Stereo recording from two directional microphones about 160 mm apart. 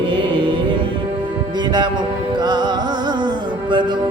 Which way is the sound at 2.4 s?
25° right (ahead or behind).